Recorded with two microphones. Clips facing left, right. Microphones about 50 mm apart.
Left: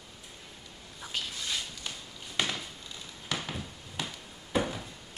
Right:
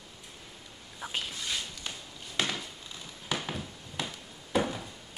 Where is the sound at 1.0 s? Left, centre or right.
Centre.